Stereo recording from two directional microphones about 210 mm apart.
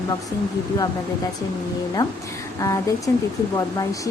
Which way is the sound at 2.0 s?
15° left (ahead or behind).